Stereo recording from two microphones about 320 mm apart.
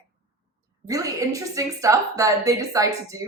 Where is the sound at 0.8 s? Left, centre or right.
Centre.